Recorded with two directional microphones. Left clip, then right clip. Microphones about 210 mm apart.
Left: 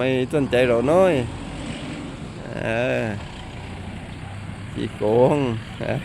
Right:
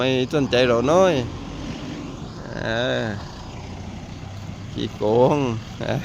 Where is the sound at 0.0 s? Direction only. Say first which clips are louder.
Even; centre (ahead or behind).